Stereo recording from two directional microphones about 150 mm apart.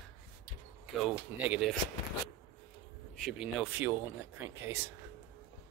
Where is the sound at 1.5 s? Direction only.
5° right (ahead or behind).